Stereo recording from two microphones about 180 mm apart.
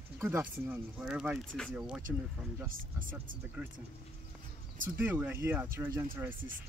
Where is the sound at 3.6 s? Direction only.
10° right (ahead or behind).